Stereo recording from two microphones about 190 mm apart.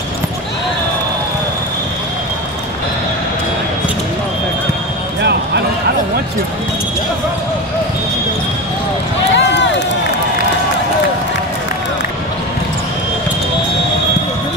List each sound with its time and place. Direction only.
9.3 s run: 70° left (ahead or behind)